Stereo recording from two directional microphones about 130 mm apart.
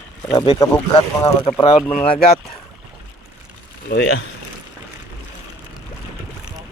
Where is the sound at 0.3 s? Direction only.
35° left (ahead or behind).